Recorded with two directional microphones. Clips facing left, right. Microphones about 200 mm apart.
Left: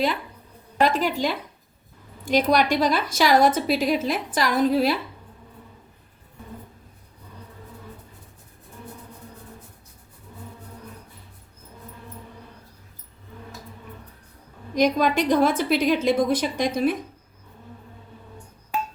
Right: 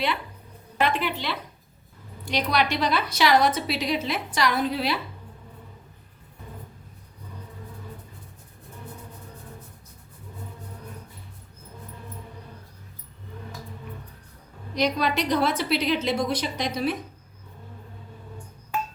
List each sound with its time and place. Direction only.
0.8 s a woman's voice: 40° left (ahead or behind)
14.8 s a woman's voice: 50° left (ahead or behind)